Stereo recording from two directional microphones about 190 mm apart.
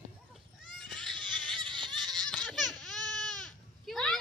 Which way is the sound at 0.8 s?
Centre (ahead or behind).